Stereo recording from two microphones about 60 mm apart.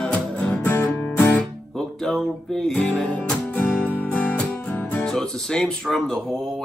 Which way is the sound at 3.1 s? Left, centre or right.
Left.